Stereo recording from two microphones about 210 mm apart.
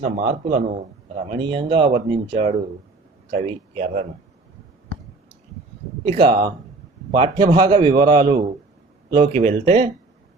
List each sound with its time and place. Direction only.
0.4 s a man's voice: 35° right (ahead or behind)
6.1 s a man's voice: 25° right (ahead or behind)
9.1 s speech: 30° right (ahead or behind)